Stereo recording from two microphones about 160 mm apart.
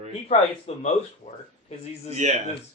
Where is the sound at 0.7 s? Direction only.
40° left (ahead or behind).